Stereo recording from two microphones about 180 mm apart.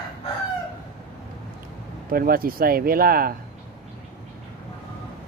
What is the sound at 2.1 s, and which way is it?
Speech, 55° right (ahead or behind).